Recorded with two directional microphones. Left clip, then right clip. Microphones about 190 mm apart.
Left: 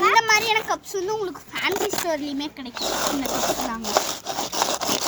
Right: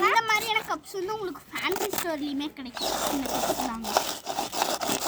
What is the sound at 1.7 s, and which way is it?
Speech, 10° right (ahead or behind).